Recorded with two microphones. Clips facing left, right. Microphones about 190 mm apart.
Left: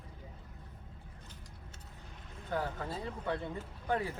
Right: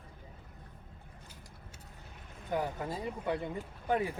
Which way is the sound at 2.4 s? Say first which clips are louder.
Right 2 dB; 15° right (ahead or behind).